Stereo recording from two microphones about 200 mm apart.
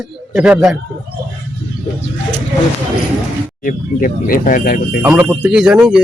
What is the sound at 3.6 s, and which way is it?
Speech, 45° left (ahead or behind).